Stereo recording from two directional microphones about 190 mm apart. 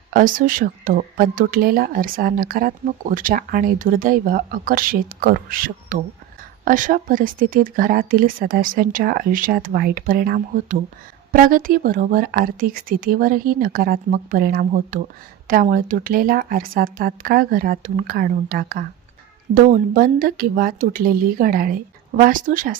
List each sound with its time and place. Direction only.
0.1 s speech: 45° right (ahead or behind)